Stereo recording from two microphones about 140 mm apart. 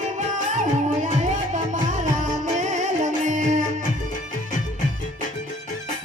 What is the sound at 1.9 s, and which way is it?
Music, 60° right (ahead or behind).